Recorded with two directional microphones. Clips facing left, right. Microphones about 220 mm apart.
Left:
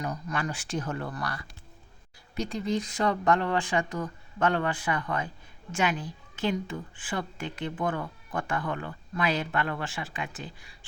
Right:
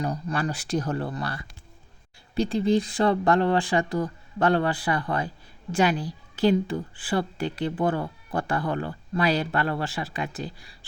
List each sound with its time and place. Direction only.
0.0 s a woman's voice: 30° right (ahead or behind)